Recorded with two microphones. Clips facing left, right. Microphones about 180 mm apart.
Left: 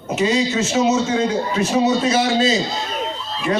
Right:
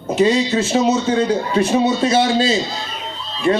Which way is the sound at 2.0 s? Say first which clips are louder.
Right 2 dB; 30° right (ahead or behind).